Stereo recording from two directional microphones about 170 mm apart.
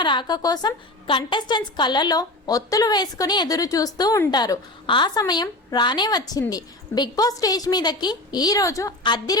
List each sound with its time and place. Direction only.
0.0 s a woman's voice: 25° left (ahead or behind)